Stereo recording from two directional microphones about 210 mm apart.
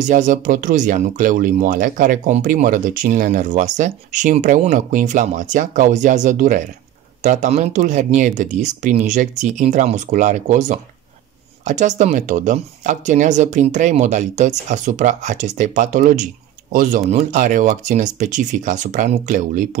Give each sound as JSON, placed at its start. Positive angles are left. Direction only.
{"t": 0.0, "sound": "speech", "side_deg": -40}